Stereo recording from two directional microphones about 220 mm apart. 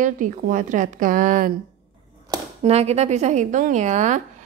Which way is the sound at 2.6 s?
30° right (ahead or behind).